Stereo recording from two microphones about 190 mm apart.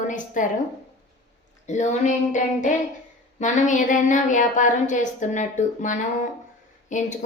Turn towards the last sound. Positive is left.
turn(degrees=40)  # may be behind; listen again after turning